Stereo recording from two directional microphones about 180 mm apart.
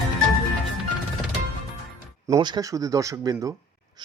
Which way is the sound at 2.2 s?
20° right (ahead or behind).